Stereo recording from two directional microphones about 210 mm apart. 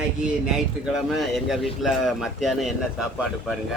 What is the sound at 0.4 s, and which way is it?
A man's voice, 5° right (ahead or behind).